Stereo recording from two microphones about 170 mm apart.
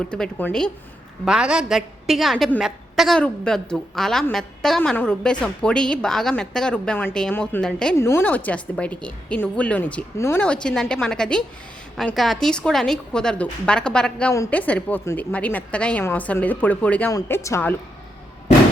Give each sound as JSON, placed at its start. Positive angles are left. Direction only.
{"t": 0.0, "sound": "a woman's voice", "side_deg": 5}
{"t": 1.2, "sound": "a woman's voice", "side_deg": -5}
{"t": 7.9, "sound": "a woman's voice", "side_deg": 15}